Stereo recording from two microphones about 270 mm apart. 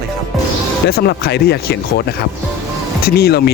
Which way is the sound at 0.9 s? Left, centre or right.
Left.